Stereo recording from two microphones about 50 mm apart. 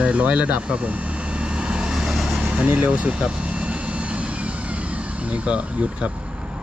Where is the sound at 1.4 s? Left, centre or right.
Right.